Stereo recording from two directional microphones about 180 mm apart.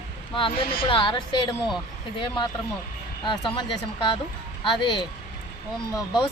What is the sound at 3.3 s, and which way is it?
Speech, 25° left (ahead or behind).